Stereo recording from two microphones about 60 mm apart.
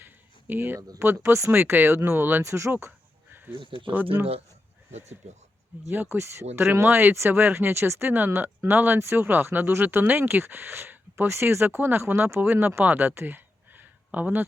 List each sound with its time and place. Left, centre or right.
0.0 s a sound: right
0.9 s speech: right
1.5 s speech: right
2.4 s speech: right
3.9 s speech: right
5.9 s speech: right
8.1 s speech: right